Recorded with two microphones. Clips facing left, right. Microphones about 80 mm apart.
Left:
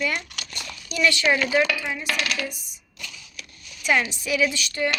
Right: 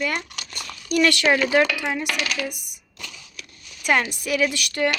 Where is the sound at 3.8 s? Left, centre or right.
Right.